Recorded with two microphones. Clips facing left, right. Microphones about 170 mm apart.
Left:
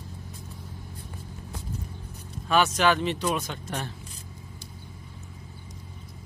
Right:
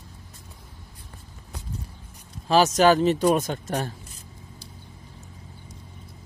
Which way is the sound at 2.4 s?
40° right (ahead or behind).